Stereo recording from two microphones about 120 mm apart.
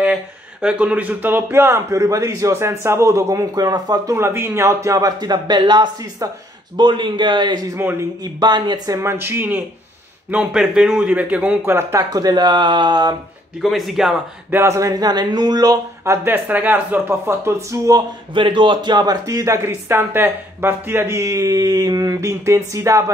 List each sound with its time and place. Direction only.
0.0 s speech: 10° right (ahead or behind); by 7.6 s 40° right (ahead or behind)
7.7 s speech: 15° right (ahead or behind)
8.2 s speech: 35° right (ahead or behind)
13.6 s speech: centre (ahead or behind)
14.5 s speech: 25° right (ahead or behind)
16.3 s speech: 15° right (ahead or behind)
18.3 s speech: 45° right (ahead or behind); by 23.1 s 25° right (ahead or behind)